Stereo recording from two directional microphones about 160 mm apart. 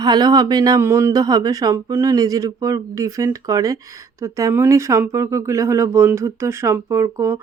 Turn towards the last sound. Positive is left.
turn(degrees=-20)  # may be behind; listen again after turning